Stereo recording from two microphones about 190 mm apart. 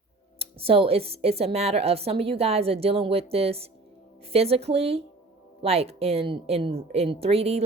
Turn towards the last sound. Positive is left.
turn(degrees=-30)  # may be behind; listen again after turning